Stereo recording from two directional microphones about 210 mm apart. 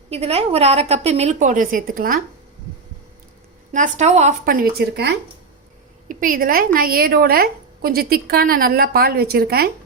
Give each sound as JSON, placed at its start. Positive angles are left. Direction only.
{"t": 0.1, "sound": "a woman's voice", "side_deg": -30}
{"t": 3.7, "sound": "a woman's voice", "side_deg": -35}
{"t": 6.1, "sound": "a woman's voice", "side_deg": -40}